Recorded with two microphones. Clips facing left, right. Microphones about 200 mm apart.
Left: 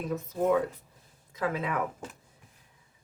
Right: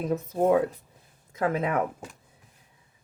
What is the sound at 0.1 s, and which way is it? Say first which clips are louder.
Speech: right 4 dB; 35° right (ahead or behind).